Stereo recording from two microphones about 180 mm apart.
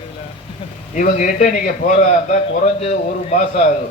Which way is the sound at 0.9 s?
45° left (ahead or behind).